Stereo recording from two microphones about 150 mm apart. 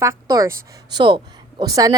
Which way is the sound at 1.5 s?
25° right (ahead or behind).